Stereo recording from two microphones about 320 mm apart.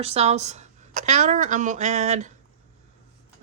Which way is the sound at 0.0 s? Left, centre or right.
Centre.